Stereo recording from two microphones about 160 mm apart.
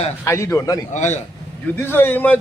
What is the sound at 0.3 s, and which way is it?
Speech, 20° left (ahead or behind).